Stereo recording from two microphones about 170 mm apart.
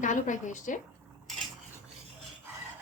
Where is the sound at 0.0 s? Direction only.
45° left (ahead or behind).